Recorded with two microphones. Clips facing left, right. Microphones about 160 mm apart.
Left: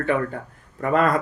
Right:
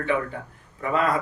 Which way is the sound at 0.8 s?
55° left (ahead or behind).